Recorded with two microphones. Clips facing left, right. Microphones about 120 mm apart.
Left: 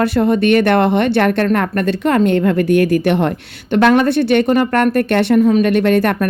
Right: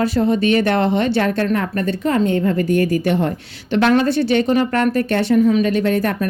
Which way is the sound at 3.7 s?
55° left (ahead or behind).